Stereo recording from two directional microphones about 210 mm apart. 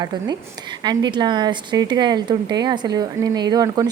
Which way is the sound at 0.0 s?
20° right (ahead or behind).